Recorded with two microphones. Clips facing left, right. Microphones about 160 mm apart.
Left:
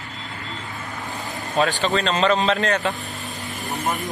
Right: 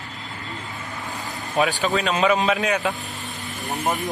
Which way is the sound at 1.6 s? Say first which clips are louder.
Left 1 dB; 5° right (ahead or behind).